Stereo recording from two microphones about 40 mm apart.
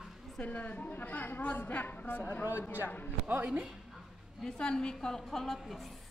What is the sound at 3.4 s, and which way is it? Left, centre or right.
Speech, right.